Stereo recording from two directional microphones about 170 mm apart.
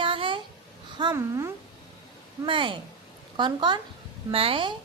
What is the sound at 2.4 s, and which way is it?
Speech, 30° right (ahead or behind).